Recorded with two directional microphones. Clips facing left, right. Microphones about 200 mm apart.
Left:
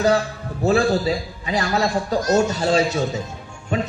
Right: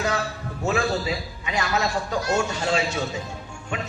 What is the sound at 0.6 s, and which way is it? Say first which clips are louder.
A man's voice: left 6 dB; 35° left (ahead or behind).